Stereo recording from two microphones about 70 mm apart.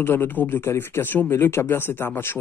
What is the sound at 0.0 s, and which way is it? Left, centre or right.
Speech, left.